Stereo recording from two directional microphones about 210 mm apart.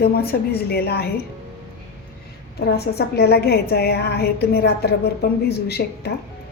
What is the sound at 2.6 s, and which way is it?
A woman's voice, 50° left (ahead or behind).